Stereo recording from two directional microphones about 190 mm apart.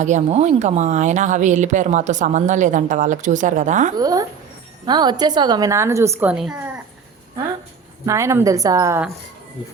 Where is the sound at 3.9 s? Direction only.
20° right (ahead or behind).